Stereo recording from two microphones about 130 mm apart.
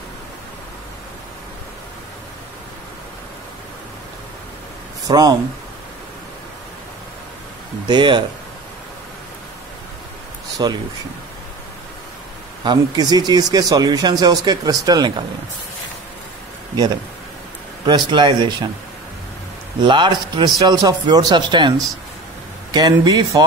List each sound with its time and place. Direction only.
5.0 s speech: 30° right (ahead or behind)
7.9 s speech: 35° right (ahead or behind)
10.6 s speech: 35° right (ahead or behind)
12.6 s speech: 30° right (ahead or behind)
17.8 s speech: 35° right (ahead or behind)
19.8 s speech: 35° right (ahead or behind)